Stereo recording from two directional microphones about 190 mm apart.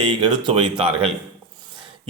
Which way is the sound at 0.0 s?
25° right (ahead or behind).